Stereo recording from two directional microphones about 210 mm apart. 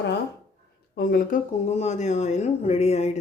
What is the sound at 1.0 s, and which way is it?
Speech, 45° left (ahead or behind).